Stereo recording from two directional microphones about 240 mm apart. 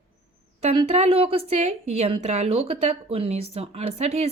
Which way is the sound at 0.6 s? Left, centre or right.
Right.